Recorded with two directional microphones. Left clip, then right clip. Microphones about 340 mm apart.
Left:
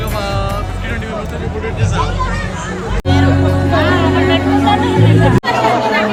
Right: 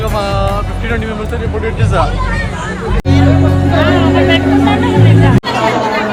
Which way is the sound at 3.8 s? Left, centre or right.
Centre.